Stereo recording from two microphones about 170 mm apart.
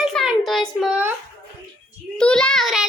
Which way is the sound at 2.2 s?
5° left (ahead or behind).